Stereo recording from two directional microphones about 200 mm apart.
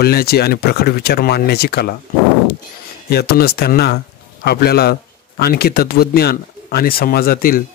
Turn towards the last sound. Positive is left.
turn(degrees=45)  # may be behind; listen again after turning